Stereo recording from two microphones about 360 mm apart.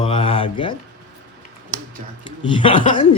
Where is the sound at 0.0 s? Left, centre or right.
Centre.